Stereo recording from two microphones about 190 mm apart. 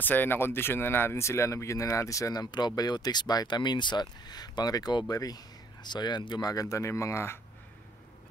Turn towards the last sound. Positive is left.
turn(degrees=15)  # may be behind; listen again after turning